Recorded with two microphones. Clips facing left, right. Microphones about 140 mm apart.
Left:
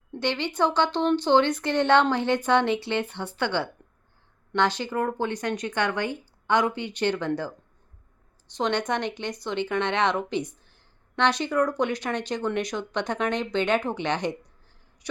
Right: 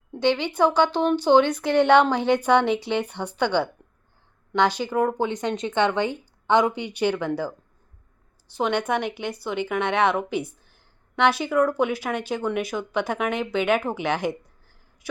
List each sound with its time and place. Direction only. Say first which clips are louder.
0.1 s speech: right 5 dB; 15° right (ahead or behind)